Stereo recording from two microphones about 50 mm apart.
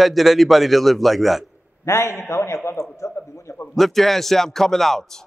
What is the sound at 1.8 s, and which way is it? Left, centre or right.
Speech, left.